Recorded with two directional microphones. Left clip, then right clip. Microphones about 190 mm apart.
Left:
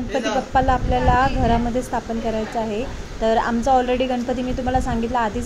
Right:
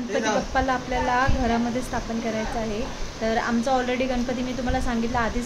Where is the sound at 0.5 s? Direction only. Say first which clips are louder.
Left 5 dB; 15° left (ahead or behind).